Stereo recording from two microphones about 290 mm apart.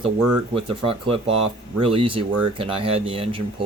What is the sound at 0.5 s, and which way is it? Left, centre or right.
Speech, centre.